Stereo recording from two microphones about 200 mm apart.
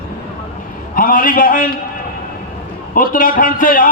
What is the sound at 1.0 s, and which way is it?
Speech, 45° left (ahead or behind).